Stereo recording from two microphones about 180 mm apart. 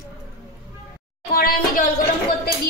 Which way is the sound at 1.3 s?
55° left (ahead or behind).